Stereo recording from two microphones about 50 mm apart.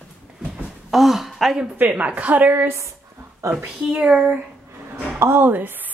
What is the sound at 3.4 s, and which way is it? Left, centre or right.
Speech, right.